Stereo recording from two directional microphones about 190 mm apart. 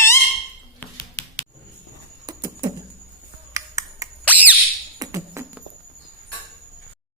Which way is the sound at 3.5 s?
15° right (ahead or behind).